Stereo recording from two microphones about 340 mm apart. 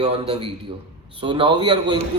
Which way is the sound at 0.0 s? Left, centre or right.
Centre.